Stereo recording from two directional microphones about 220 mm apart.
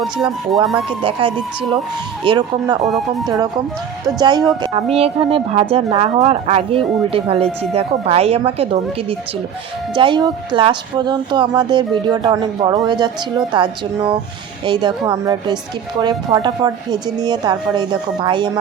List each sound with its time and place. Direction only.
0.3 s music: centre (ahead or behind)
0.9 s a woman's voice: 25° right (ahead or behind)
2.8 s music: centre (ahead or behind)
3.2 s a woman's voice: 15° right (ahead or behind)